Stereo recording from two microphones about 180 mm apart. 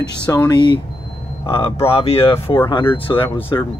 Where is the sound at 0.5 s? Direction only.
25° left (ahead or behind).